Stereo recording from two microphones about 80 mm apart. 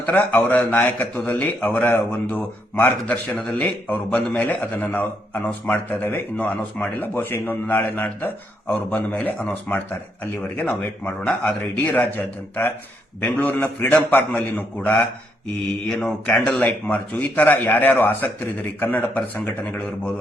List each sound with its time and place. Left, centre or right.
0.1 s a man's voice: centre